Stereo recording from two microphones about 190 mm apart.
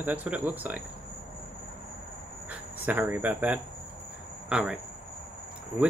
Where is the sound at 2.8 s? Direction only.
10° right (ahead or behind).